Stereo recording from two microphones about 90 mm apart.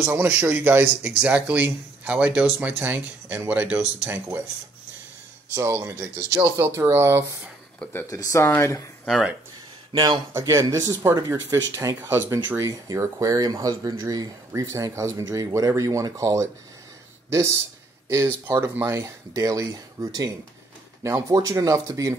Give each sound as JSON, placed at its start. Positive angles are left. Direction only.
{"t": 0.0, "sound": "speech", "side_deg": -20}
{"t": 5.5, "sound": "speech", "side_deg": -30}
{"t": 8.1, "sound": "speech", "side_deg": 35}
{"t": 9.0, "sound": "speech", "side_deg": 0}
{"t": 9.9, "sound": "a man's voice", "side_deg": -50}
{"t": 10.3, "sound": "speech", "side_deg": -35}
{"t": 21.3, "sound": "speech", "side_deg": -40}